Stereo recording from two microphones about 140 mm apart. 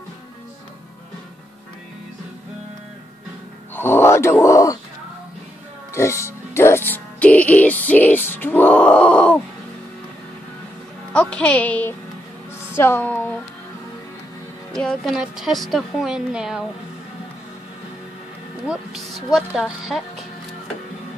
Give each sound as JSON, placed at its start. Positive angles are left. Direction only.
{"t": 3.7, "sound": "speech", "side_deg": 15}
{"t": 5.9, "sound": "speech", "side_deg": 20}
{"t": 11.1, "sound": "speech", "side_deg": 10}
{"t": 14.7, "sound": "a woman's voice", "side_deg": 5}
{"t": 18.7, "sound": "a woman's voice", "side_deg": -5}